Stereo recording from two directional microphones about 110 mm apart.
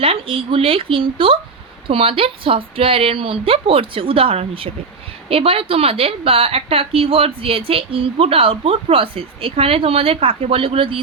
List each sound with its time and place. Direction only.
0.0 s a woman's voice: 55° right (ahead or behind)